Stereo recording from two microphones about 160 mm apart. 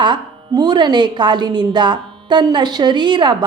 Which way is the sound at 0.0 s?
30° right (ahead or behind).